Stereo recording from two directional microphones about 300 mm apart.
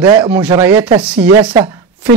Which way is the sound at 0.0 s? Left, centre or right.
Centre.